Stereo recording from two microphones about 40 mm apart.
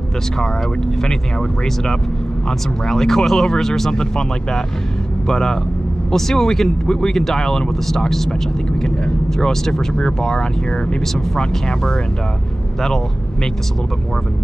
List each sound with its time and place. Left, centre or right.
1.0 s speech: centre